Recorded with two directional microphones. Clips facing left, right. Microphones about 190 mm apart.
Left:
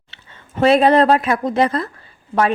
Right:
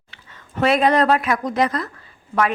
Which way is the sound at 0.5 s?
30° left (ahead or behind).